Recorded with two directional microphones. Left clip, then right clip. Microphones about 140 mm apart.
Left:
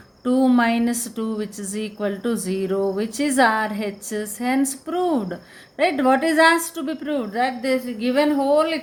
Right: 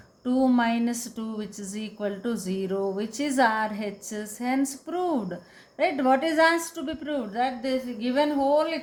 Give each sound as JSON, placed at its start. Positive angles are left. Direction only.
{"t": 0.3, "sound": "a woman's voice", "side_deg": 25}